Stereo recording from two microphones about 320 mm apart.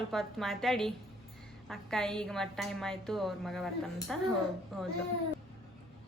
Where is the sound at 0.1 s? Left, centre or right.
Centre.